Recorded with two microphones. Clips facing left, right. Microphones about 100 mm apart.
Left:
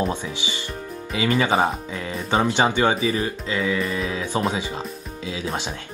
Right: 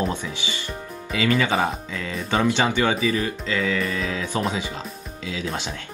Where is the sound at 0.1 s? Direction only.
20° left (ahead or behind).